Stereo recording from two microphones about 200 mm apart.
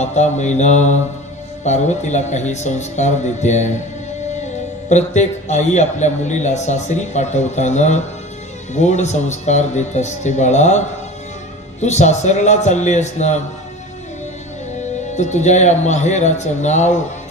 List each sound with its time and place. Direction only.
0.0 s speech: 35° left (ahead or behind)
11.8 s speech: 35° left (ahead or behind)
14.8 s speech: 35° left (ahead or behind)